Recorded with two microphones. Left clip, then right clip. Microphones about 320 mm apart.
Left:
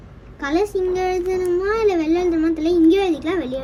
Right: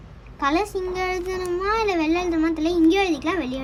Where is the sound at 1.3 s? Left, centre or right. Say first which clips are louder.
Left 6 dB; right.